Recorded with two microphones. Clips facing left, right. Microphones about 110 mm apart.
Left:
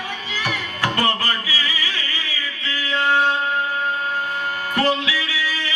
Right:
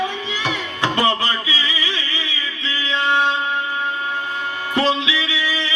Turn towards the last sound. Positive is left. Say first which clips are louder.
# right 2 dB
turn(degrees=-20)  # may be behind; listen again after turning